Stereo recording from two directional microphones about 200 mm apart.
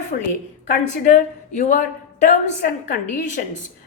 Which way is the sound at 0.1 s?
40° left (ahead or behind).